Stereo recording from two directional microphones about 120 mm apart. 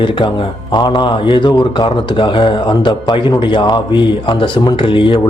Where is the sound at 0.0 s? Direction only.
45° left (ahead or behind).